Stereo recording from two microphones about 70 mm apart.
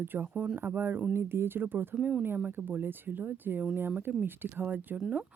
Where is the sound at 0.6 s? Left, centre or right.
Right.